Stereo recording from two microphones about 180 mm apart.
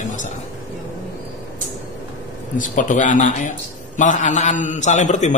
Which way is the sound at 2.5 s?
45° left (ahead or behind).